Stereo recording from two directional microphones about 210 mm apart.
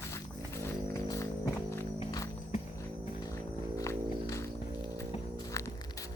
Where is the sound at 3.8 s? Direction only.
15° left (ahead or behind).